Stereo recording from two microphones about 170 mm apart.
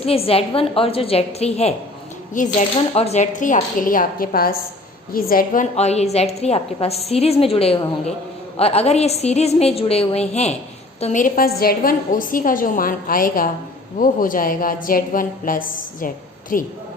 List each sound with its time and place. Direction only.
0.0 s a woman's voice: 35° left (ahead or behind); by 5.6 s 60° left (ahead or behind)
5.7 s a woman's voice: 40° left (ahead or behind)